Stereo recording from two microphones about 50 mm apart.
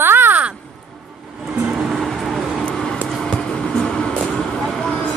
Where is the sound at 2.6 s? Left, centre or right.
Centre.